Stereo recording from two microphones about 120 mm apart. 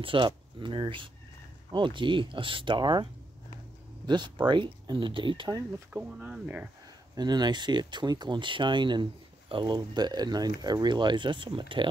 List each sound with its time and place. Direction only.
0.0 s speech: 45° right (ahead or behind)
5.9 s speech: 10° right (ahead or behind)
7.2 s speech: 35° right (ahead or behind)